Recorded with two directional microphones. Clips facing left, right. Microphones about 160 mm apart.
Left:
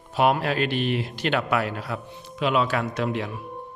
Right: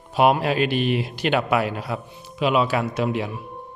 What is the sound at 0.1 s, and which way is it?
Speech, 15° right (ahead or behind).